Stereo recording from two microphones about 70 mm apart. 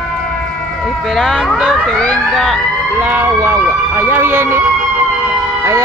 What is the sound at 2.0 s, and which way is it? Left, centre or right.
Speech, centre.